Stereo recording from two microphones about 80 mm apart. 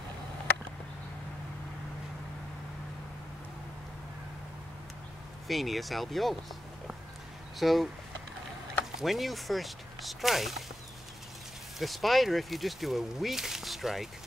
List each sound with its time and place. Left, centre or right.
5.5 s speech: centre
7.5 s speech: centre
8.9 s speech: centre
11.8 s speech: centre